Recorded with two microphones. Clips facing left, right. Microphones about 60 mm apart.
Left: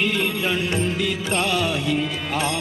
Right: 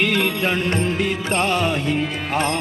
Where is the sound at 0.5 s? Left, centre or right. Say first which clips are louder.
Right 2 dB; right.